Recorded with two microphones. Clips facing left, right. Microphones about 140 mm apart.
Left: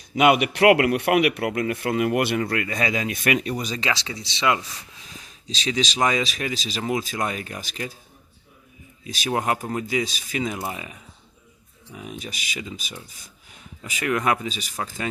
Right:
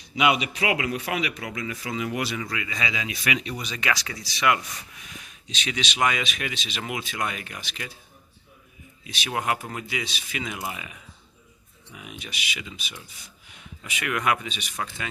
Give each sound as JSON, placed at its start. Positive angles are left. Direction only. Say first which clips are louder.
{"t": 0.2, "sound": "a man's voice", "louder": "left 6 dB", "side_deg": 55}
{"t": 3.8, "sound": "speech", "louder": "left 1 dB", "side_deg": 25}
{"t": 9.0, "sound": "speech", "louder": "left 3 dB", "side_deg": 40}